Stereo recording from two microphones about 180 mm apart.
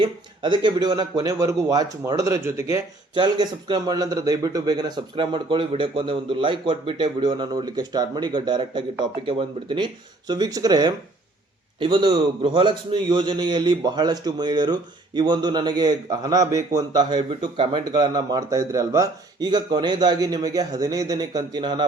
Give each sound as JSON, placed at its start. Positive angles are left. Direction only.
{"t": 0.0, "sound": "speech", "side_deg": -25}